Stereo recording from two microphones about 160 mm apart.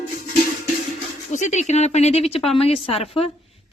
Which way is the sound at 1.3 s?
45° left (ahead or behind).